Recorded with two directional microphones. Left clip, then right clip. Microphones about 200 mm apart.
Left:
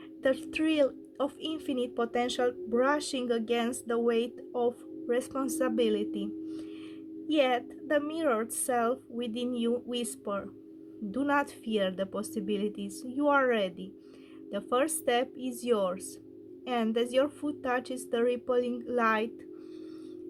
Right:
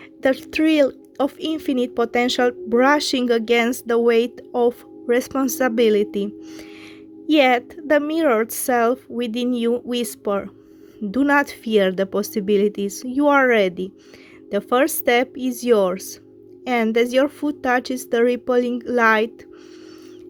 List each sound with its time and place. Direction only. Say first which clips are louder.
0.2 s a woman's voice: right 10 dB; 35° right (ahead or behind)